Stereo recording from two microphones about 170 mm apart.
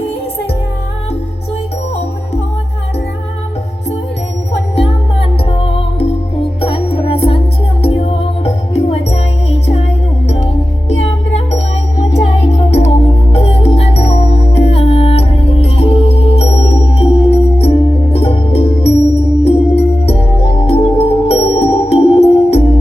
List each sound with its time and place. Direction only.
4.7 s music: 35° left (ahead or behind)
10.8 s music: 40° left (ahead or behind)
12.5 s music: 40° left (ahead or behind)